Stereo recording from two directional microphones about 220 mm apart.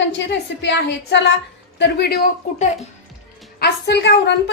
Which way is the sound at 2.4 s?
35° left (ahead or behind).